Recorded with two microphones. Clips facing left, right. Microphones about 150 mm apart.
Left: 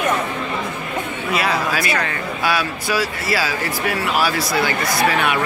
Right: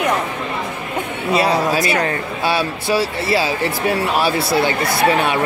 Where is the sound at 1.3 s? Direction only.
30° right (ahead or behind).